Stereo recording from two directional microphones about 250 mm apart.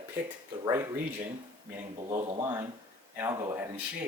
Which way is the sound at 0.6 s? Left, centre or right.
Centre.